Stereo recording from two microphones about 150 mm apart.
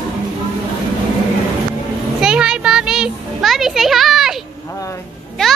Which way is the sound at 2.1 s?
5° right (ahead or behind).